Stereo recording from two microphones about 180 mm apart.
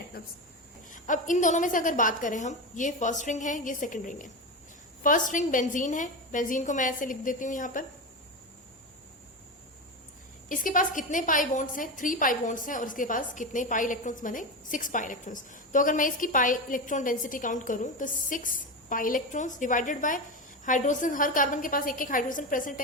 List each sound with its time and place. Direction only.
0.2 s speech: 55° left (ahead or behind)
0.9 s a woman's voice: 45° left (ahead or behind)
10.5 s a woman's voice: 50° left (ahead or behind)